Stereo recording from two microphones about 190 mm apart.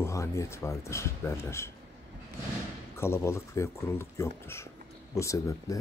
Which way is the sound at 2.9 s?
15° left (ahead or behind).